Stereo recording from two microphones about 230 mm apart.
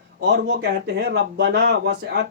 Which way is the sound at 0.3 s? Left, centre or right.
Right.